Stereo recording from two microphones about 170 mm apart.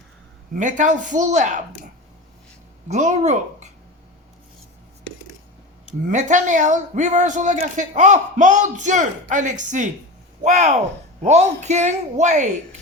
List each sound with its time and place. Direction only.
0.5 s a man's voice: 50° right (ahead or behind)
2.9 s a man's voice: 45° right (ahead or behind)
6.1 s a man's voice: 45° right (ahead or behind)